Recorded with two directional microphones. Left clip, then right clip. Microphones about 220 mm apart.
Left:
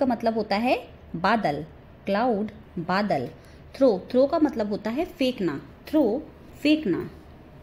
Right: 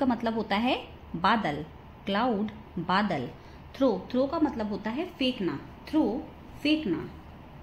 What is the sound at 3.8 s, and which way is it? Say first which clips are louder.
Speech: left 6 dB; 15° left (ahead or behind).